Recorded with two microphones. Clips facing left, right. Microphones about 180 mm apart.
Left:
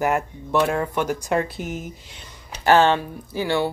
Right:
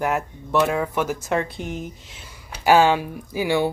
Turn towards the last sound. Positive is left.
turn(degrees=-15)  # may be behind; listen again after turning